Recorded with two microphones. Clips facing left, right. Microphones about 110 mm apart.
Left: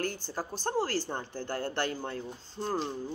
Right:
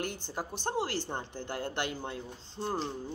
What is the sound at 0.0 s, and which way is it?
A woman's voice, 20° right (ahead or behind).